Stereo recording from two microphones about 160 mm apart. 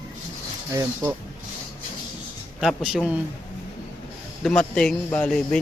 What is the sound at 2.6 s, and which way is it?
Speech, centre (ahead or behind).